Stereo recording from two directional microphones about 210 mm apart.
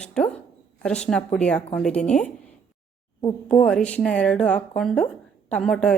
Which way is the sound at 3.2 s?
20° left (ahead or behind).